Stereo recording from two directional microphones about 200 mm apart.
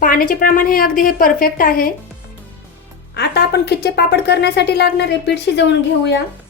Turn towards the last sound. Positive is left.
turn(degrees=60)  # may be behind; listen again after turning